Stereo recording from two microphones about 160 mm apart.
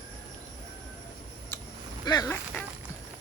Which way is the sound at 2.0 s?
25° left (ahead or behind).